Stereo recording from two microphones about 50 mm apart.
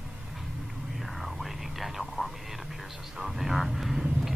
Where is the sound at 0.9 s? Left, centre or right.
Centre.